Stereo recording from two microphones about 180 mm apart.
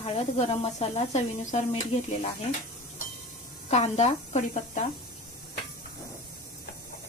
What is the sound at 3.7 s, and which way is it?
Speech, 40° left (ahead or behind).